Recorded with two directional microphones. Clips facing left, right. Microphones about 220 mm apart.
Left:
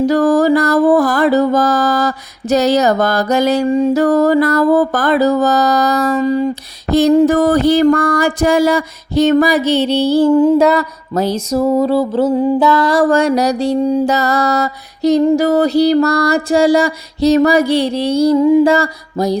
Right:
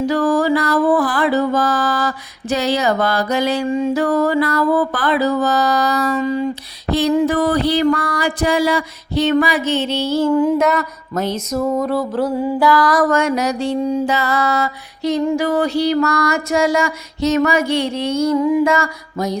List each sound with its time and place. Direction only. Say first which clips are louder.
0.0 s mantra: left 5 dB; 40° left (ahead or behind)